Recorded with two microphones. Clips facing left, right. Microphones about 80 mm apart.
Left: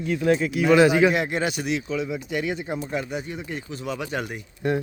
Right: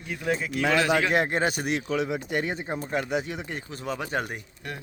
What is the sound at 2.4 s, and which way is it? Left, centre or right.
Speech, right.